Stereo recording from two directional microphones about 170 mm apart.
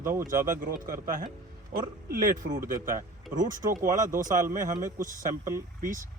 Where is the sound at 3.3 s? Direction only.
55° right (ahead or behind).